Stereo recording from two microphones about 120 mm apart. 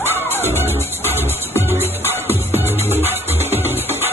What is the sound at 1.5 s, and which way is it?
Music, 20° right (ahead or behind).